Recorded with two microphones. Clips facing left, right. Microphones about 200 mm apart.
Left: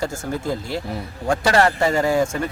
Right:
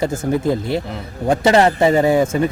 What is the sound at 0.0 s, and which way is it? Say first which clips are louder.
A man's voice: right 7 dB; 20° right (ahead or behind).